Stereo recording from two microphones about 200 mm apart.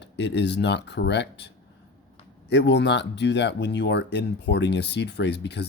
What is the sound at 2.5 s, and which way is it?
Speech, 60° left (ahead or behind).